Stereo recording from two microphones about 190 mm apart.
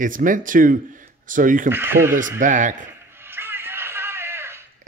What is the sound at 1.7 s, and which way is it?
Speech, 10° right (ahead or behind).